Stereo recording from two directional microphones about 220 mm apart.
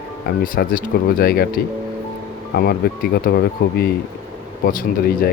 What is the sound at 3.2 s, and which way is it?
Speech, 45° left (ahead or behind).